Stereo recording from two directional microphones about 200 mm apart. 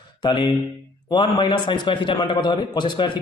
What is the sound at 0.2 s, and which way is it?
Speech, 25° left (ahead or behind).